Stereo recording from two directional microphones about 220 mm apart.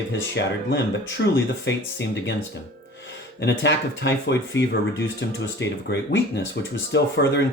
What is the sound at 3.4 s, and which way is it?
Speech, 55° left (ahead or behind).